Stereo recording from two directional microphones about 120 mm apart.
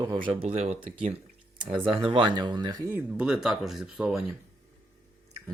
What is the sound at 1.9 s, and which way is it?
Speech, 45° right (ahead or behind).